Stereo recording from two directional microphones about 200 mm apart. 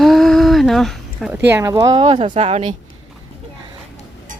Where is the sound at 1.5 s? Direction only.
10° right (ahead or behind).